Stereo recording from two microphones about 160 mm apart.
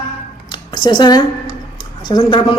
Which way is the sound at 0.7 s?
30° left (ahead or behind).